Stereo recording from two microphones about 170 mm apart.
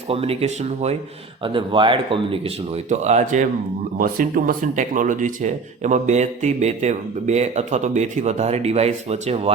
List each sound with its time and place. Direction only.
0.1 s speech: 35° right (ahead or behind)
3.9 s speech: 55° right (ahead or behind); by 9.5 s 40° right (ahead or behind)